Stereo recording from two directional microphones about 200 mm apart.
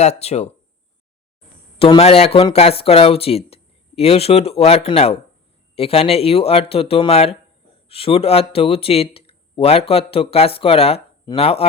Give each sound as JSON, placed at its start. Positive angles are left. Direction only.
{"t": 0.0, "sound": "speech", "side_deg": 30}
{"t": 1.8, "sound": "speech", "side_deg": 30}